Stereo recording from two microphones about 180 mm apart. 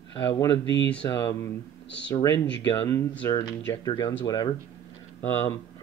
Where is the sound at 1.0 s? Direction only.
20° left (ahead or behind).